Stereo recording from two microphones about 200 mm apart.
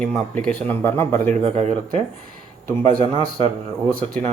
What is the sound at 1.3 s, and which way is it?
Speech, 35° right (ahead or behind).